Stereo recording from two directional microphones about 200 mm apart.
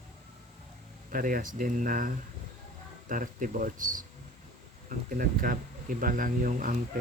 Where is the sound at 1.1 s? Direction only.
45° right (ahead or behind).